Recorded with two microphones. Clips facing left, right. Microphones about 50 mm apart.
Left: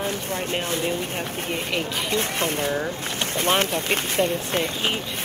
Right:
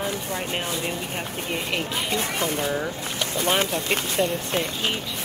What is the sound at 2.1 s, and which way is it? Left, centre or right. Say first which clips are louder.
Speech: left 2 dB; left.